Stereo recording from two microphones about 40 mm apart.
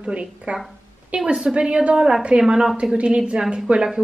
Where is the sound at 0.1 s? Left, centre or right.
Right.